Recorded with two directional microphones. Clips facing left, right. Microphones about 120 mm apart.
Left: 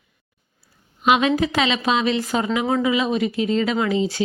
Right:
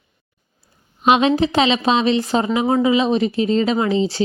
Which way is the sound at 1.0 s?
25° right (ahead or behind).